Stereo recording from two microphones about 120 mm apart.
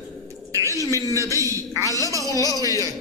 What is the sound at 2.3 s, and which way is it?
Speech, 30° left (ahead or behind).